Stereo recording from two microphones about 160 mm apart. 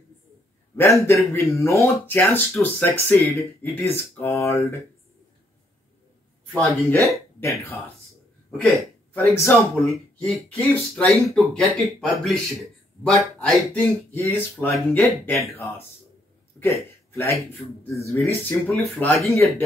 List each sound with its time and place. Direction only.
0.7 s speech: 15° left (ahead or behind)
6.5 s speech: 10° left (ahead or behind)
8.5 s speech: 5° left (ahead or behind)
13.7 s a man's voice: 15° left (ahead or behind)